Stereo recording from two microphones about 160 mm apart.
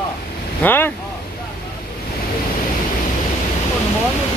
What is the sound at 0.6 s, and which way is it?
Speech, 15° left (ahead or behind).